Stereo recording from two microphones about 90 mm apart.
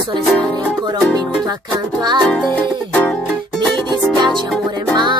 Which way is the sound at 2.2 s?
10° left (ahead or behind).